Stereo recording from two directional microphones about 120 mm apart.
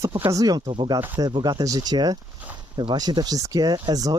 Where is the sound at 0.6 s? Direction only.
50° right (ahead or behind).